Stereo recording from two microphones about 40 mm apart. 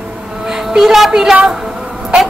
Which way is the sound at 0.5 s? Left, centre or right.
Centre.